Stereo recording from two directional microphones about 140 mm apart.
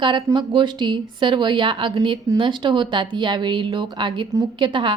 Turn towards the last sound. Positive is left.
turn(degrees=-35)  # may be behind; listen again after turning